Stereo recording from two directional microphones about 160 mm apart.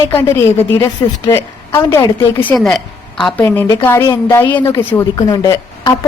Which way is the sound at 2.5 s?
5° left (ahead or behind).